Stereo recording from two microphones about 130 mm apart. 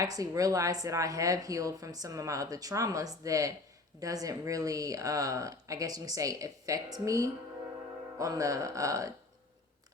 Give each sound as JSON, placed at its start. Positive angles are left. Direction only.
{"t": 0.0, "sound": "a woman's voice", "side_deg": -25}